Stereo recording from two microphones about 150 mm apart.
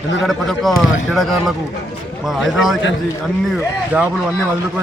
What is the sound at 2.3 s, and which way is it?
Speech, centre (ahead or behind).